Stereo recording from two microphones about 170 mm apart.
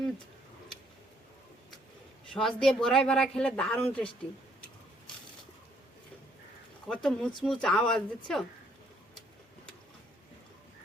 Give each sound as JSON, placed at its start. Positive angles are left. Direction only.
{"t": 2.3, "sound": "speech", "side_deg": 5}
{"t": 6.8, "sound": "speech", "side_deg": 5}